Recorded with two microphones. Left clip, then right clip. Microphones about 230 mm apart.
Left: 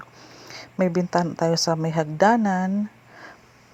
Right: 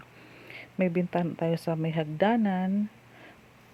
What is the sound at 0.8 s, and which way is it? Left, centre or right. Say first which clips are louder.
Speech: left 6 dB; centre.